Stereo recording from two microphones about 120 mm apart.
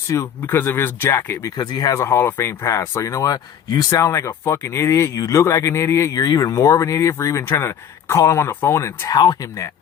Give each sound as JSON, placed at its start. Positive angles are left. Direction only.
{"t": 0.1, "sound": "speech", "side_deg": 20}
{"t": 1.5, "sound": "speech", "side_deg": 35}
{"t": 1.9, "sound": "speech", "side_deg": 25}